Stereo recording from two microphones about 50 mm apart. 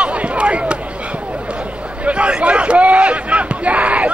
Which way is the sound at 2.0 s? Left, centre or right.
Right.